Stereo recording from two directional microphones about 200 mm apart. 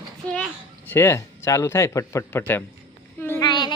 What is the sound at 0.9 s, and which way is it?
A man's voice, 10° left (ahead or behind).